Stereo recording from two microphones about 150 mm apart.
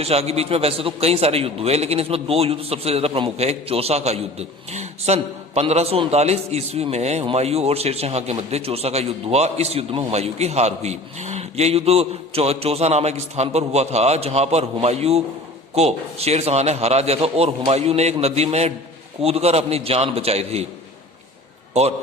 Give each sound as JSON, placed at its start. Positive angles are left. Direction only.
{"t": 0.0, "sound": "a man's voice", "side_deg": -45}
{"t": 21.7, "sound": "a man's voice", "side_deg": -45}